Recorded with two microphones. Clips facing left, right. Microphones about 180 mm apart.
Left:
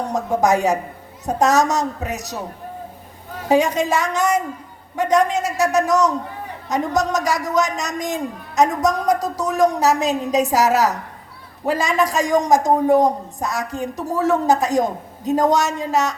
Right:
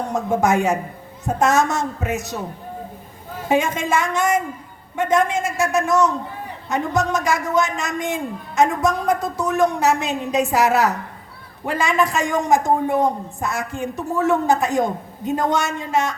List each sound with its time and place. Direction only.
0.4 s a man's voice: 40° left (ahead or behind)
3.5 s a man's voice: 40° left (ahead or behind)